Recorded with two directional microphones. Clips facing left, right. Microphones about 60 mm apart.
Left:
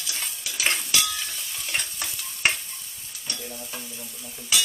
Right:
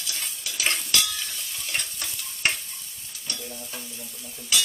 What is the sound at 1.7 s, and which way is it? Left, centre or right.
Stir, centre.